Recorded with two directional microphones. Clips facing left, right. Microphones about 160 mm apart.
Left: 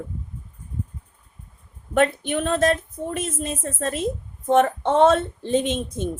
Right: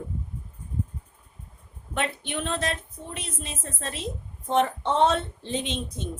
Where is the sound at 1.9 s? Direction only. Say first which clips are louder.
Left 9 dB; 45° left (ahead or behind).